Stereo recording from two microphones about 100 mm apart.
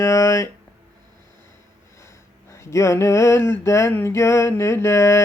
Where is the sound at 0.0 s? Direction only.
30° left (ahead or behind).